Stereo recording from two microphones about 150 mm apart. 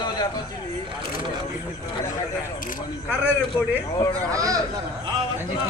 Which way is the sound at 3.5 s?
15° left (ahead or behind).